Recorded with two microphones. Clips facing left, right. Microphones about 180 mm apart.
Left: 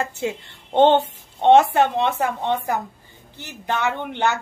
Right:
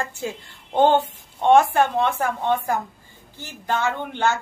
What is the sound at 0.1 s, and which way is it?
A woman's voice, 20° left (ahead or behind).